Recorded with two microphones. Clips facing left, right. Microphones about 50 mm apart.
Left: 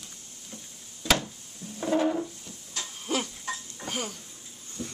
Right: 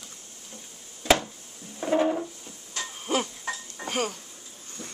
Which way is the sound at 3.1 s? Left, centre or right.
Right.